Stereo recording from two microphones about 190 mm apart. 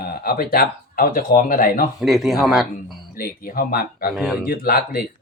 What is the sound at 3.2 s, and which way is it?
Speech, 50° left (ahead or behind).